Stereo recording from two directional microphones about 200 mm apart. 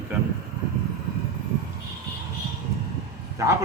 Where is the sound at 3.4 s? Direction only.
15° right (ahead or behind).